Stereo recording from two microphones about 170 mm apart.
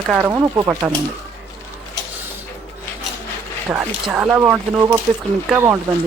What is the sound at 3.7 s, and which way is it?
Speech, 5° right (ahead or behind).